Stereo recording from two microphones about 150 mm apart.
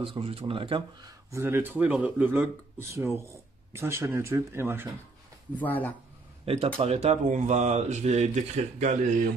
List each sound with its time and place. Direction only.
0.0 s speech: 40° right (ahead or behind)
1.3 s speech: 15° right (ahead or behind)
5.6 s speech: 10° left (ahead or behind)
6.4 s speech: 45° right (ahead or behind)